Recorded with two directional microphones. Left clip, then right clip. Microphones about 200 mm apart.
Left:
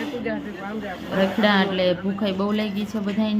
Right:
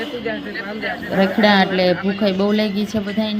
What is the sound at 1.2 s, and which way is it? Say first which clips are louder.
A woman's voice: right 5 dB; 15° right (ahead or behind).